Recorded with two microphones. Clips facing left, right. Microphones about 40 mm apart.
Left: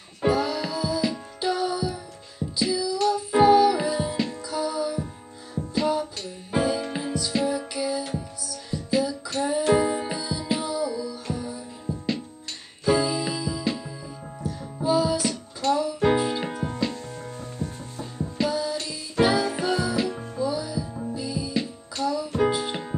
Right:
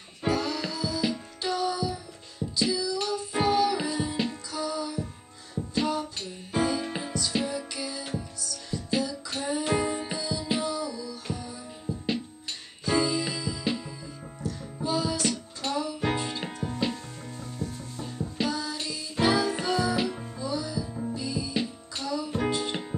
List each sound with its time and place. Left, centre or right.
0.3 s music: centre
6.5 s music: centre
15.2 s music: centre
16.0 s music: centre
18.5 s music: centre